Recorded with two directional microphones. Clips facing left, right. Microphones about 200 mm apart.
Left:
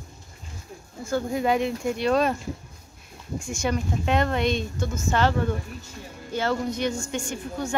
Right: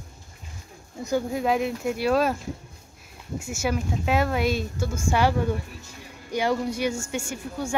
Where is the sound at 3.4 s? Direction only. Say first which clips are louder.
Even; 5° right (ahead or behind).